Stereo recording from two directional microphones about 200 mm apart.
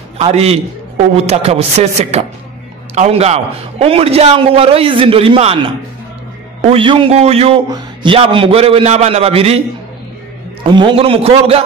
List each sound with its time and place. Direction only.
0.2 s a man's voice: 30° right (ahead or behind)
6.6 s a man's voice: 25° right (ahead or behind)
10.6 s a man's voice: 25° right (ahead or behind)